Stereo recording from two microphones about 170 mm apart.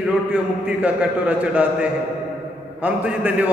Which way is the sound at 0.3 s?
10° right (ahead or behind).